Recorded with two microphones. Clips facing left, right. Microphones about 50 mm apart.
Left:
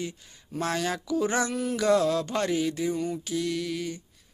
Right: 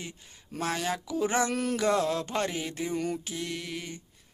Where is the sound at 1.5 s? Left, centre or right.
Right.